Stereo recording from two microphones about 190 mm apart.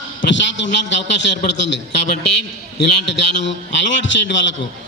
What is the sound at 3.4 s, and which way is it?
Speech, 70° left (ahead or behind).